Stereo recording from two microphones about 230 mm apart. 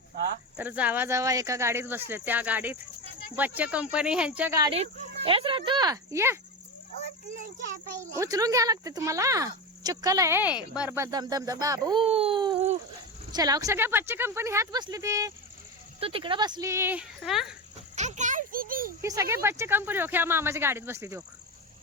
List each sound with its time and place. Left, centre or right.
0.5 s speech: centre
4.7 s speech: right
8.2 s speech: centre
13.3 s speech: centre
17.9 s a sound: right
19.0 s speech: centre